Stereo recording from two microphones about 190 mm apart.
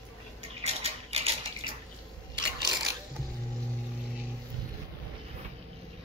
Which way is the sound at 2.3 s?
25° right (ahead or behind).